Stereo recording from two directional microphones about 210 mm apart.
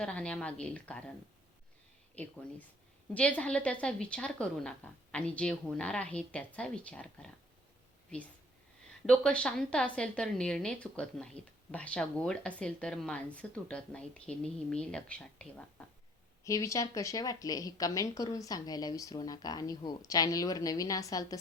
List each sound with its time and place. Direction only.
0.0 s a woman's voice: 5° left (ahead or behind)
2.1 s a woman's voice: 5° left (ahead or behind)
16.4 s a woman's voice: 15° left (ahead or behind)